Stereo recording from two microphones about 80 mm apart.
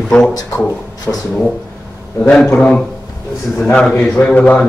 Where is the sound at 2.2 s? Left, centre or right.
Centre.